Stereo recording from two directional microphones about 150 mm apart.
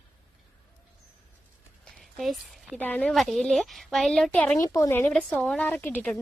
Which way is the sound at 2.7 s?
10° left (ahead or behind).